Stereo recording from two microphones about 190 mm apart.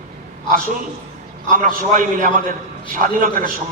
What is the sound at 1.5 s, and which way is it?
A man's voice, 45° right (ahead or behind).